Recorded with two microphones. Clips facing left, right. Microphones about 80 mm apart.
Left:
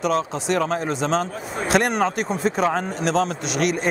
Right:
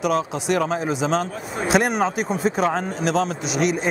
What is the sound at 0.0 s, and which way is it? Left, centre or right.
A man's voice, centre.